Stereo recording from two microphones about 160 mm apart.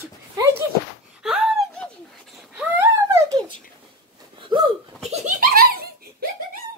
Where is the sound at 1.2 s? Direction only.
5° right (ahead or behind); by 4.6 s 30° right (ahead or behind).